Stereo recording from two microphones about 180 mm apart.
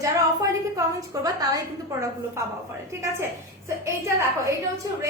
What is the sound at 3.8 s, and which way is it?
Speech, 15° right (ahead or behind).